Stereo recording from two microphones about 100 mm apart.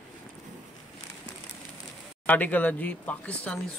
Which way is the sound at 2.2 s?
15° left (ahead or behind).